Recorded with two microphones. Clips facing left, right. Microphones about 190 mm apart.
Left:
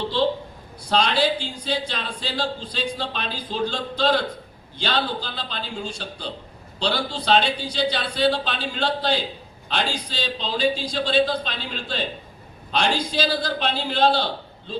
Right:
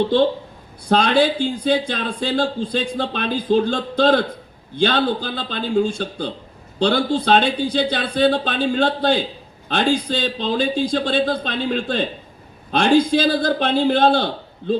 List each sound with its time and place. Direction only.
0.9 s speech: 55° right (ahead or behind)